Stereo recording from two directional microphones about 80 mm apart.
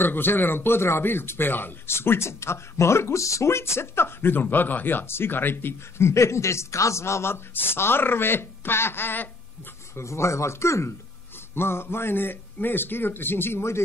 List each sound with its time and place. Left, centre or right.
0.0 s speech: left
9.9 s speech: left